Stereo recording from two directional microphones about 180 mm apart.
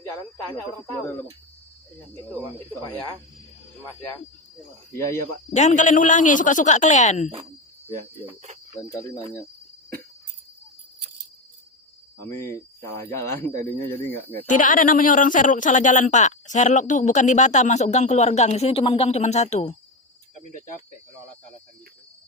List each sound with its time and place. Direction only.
0.5 s cricket: 10° left (ahead or behind)
2.6 s cricket: 10° left (ahead or behind)
4.9 s cricket: 15° left (ahead or behind)
5.5 s a man's voice: 40° left (ahead or behind)
8.8 s cricket: 15° left (ahead or behind)
12.2 s cricket: 15° left (ahead or behind)
14.4 s a woman's voice: 45° left (ahead or behind)